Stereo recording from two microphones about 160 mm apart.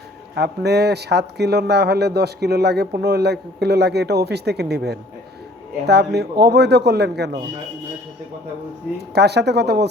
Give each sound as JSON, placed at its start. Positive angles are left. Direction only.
{"t": 0.3, "sound": "speech", "side_deg": -90}
{"t": 9.0, "sound": "speech", "side_deg": -90}